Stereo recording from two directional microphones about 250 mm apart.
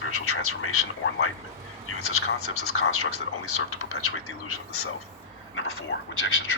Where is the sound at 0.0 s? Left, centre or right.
Left.